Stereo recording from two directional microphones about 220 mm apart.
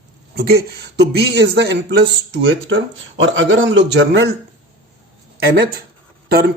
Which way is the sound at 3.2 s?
60° right (ahead or behind).